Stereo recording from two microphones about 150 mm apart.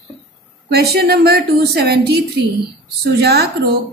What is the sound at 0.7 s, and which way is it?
A woman's voice, 90° right.